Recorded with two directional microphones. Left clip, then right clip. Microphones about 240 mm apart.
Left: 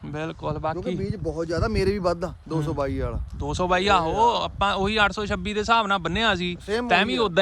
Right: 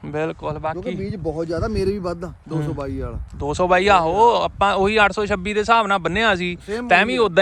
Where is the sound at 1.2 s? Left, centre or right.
Centre.